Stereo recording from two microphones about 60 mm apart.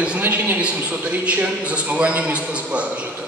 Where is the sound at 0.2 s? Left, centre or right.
Right.